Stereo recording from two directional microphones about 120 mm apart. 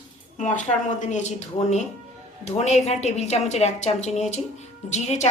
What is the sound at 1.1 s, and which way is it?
A woman's voice, 70° left (ahead or behind).